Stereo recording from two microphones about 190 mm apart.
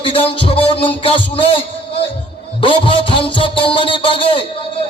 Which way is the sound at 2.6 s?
25° left (ahead or behind).